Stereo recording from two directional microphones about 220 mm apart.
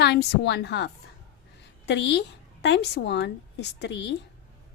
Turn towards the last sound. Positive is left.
turn(degrees=55)  # may be behind; listen again after turning